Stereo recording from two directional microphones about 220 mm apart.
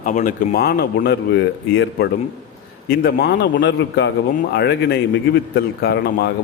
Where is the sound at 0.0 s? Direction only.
35° left (ahead or behind).